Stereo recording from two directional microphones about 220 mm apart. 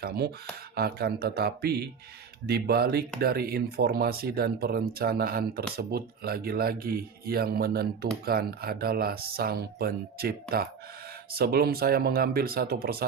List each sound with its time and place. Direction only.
0.8 s speech: 45° right (ahead or behind)